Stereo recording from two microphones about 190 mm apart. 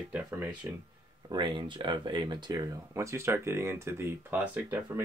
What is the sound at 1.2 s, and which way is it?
Speech, 25° right (ahead or behind).